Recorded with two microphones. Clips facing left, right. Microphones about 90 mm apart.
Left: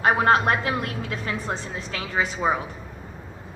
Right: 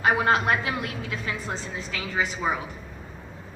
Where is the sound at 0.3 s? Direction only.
40° left (ahead or behind).